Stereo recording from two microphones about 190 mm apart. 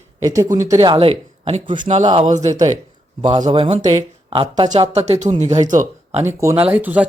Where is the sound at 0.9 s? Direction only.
30° right (ahead or behind).